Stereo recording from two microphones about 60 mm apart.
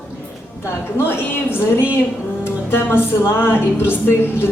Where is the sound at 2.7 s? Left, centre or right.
Left.